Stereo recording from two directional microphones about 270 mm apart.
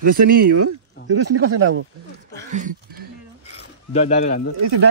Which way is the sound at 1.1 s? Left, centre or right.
Right.